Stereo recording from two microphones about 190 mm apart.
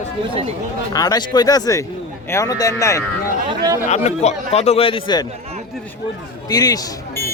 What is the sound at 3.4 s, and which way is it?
Chatter, 20° right (ahead or behind).